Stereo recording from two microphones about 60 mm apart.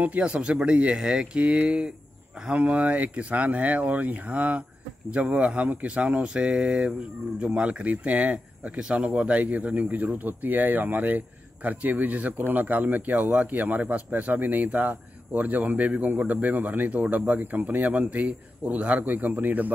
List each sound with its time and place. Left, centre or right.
0.0 s speech: right